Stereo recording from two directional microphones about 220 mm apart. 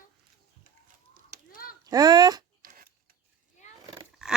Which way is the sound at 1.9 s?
15° right (ahead or behind).